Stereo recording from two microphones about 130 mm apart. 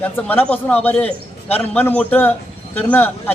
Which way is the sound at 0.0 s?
10° left (ahead or behind).